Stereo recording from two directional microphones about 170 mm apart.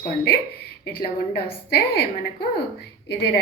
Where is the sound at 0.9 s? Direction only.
70° left (ahead or behind).